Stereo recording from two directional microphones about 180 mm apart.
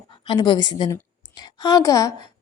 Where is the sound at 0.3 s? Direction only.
25° left (ahead or behind).